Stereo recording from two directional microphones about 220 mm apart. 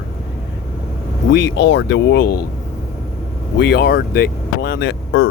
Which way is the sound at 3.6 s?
50° left (ahead or behind).